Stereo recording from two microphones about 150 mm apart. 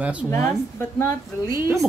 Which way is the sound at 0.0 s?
10° right (ahead or behind).